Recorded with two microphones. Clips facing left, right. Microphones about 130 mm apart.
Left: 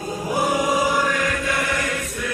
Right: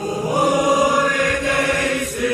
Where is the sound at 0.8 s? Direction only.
40° right (ahead or behind).